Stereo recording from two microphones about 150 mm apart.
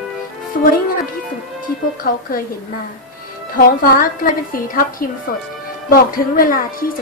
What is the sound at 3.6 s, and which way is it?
A woman's voice, 70° left (ahead or behind).